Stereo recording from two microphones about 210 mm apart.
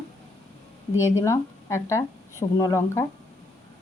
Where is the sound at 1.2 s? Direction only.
15° left (ahead or behind).